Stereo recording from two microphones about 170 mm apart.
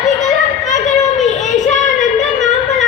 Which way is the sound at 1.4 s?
45° left (ahead or behind).